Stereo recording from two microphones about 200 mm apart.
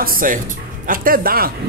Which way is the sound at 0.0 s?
45° right (ahead or behind).